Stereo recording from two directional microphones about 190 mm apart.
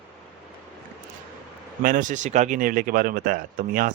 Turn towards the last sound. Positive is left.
turn(degrees=-45)  # may be behind; listen again after turning